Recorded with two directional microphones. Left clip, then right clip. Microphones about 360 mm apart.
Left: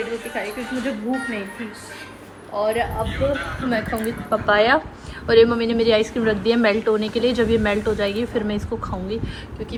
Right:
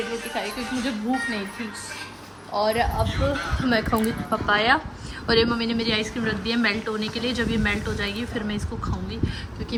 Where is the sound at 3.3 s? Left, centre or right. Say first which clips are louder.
Even; right.